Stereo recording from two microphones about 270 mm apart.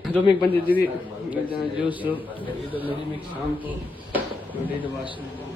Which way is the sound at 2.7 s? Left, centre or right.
Centre.